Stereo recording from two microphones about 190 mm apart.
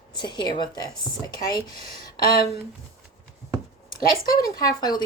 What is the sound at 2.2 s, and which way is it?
Speech, 50° left (ahead or behind).